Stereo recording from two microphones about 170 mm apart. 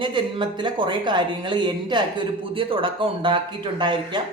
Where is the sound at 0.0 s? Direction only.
30° right (ahead or behind).